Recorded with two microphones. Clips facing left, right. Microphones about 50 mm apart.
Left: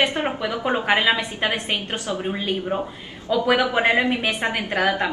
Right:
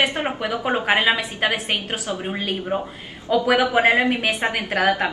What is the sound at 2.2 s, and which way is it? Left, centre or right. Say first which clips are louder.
A woman's voice: left 1 dB; centre.